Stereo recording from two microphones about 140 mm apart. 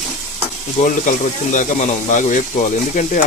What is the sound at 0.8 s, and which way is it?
Speech, 65° left (ahead or behind).